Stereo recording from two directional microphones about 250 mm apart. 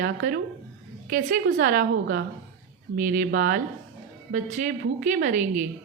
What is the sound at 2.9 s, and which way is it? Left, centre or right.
A woman's voice, right.